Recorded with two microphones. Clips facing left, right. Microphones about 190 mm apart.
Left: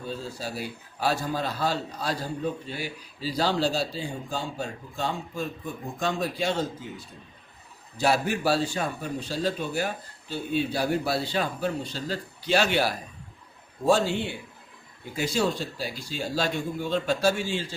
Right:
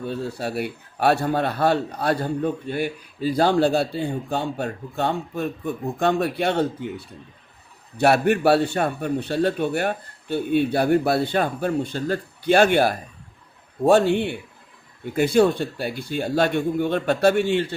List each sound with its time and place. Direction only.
0.0 s a man's voice: 65° right (ahead or behind)